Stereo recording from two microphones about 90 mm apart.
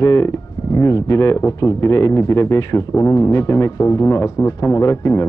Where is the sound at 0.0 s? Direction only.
35° left (ahead or behind).